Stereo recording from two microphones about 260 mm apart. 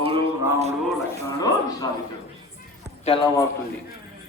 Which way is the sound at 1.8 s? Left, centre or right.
Centre.